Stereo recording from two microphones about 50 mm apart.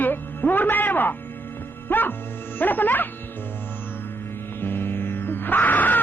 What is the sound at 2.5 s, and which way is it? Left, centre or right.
Speech, left.